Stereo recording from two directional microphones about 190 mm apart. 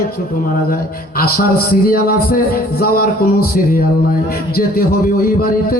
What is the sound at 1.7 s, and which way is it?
Speech, 50° left (ahead or behind).